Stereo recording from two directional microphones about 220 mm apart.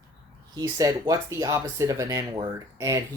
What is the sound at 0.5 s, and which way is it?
Speech, 15° right (ahead or behind).